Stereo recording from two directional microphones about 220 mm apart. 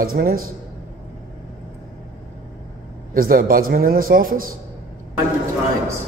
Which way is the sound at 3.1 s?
40° right (ahead or behind).